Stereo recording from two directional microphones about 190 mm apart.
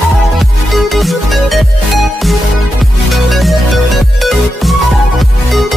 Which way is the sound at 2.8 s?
Centre (ahead or behind).